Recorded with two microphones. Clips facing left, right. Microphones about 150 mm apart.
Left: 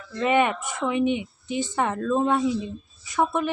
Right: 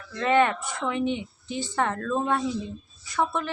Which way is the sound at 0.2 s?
15° left (ahead or behind).